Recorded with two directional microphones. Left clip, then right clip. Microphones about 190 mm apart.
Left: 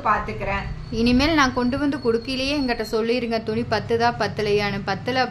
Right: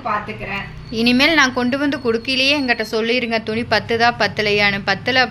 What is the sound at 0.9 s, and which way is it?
A woman's voice, centre (ahead or behind).